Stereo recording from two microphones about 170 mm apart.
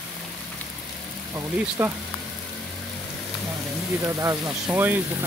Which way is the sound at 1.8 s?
15° right (ahead or behind).